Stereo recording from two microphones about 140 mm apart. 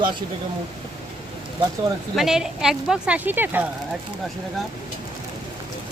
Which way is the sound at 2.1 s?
Centre (ahead or behind).